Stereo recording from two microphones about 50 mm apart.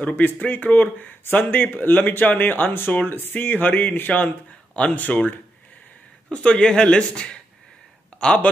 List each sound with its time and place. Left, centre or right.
0.0 s speech: left
6.3 s a man's voice: centre
8.1 s a sound: left